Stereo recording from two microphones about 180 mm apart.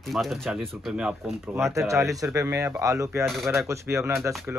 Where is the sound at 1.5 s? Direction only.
15° right (ahead or behind).